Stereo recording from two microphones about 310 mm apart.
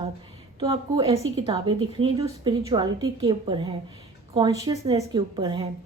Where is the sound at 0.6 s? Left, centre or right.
Centre.